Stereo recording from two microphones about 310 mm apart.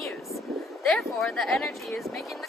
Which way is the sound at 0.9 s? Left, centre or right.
Centre.